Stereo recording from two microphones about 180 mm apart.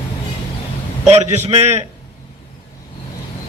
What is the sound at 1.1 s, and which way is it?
Speech, 35° right (ahead or behind).